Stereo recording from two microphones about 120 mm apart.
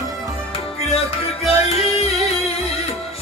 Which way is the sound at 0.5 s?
55° left (ahead or behind).